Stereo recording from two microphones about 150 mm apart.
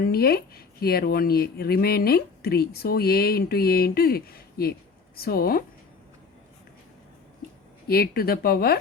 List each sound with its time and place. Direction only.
0.0 s speech: 90° left
7.9 s speech: 90° left